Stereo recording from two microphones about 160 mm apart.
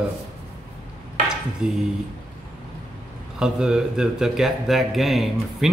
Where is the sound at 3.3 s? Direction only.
5° right (ahead or behind).